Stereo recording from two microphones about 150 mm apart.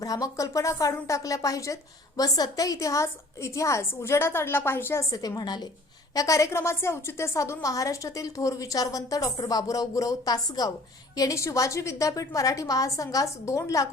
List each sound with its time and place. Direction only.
0.0 s speech: 25° left (ahead or behind)